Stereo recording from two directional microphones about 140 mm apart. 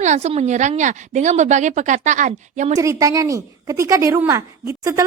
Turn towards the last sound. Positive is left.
turn(degrees=-25)  # may be behind; listen again after turning